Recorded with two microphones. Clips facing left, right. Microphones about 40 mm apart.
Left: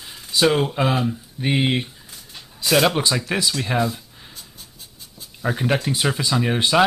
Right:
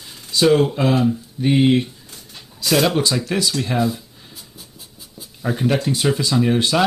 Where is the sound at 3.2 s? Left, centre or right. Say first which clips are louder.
Right 2 dB; centre.